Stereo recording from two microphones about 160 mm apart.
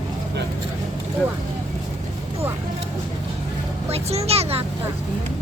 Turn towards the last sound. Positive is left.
turn(degrees=-40)  # may be behind; listen again after turning